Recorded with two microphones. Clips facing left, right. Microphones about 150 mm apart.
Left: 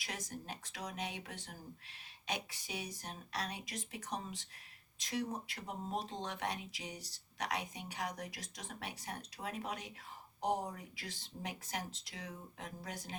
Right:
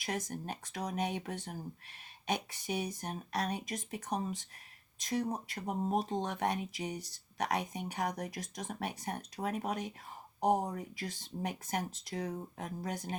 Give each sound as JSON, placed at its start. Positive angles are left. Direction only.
{"t": 0.0, "sound": "speech", "side_deg": -50}